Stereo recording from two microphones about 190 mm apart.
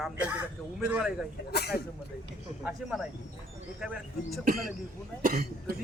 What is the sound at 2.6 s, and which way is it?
A man's voice, 5° right (ahead or behind).